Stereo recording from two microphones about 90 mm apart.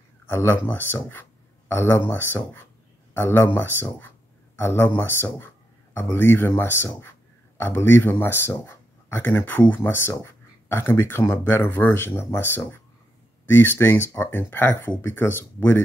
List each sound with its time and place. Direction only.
0.3 s speech: 25° left (ahead or behind)